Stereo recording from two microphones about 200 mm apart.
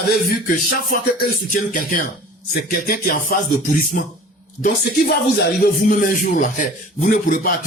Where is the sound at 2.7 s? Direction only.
45° left (ahead or behind).